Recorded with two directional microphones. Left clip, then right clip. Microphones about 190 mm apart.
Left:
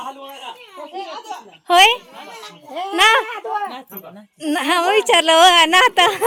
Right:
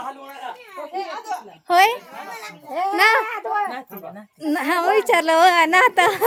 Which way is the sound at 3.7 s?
Centre (ahead or behind).